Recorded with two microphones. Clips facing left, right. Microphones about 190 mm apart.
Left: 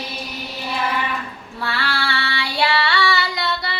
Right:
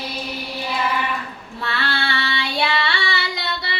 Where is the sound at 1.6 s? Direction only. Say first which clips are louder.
Left 1 dB; 25° right (ahead or behind).